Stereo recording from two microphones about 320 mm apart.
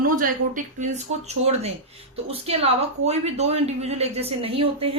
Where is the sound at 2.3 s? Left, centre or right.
Centre.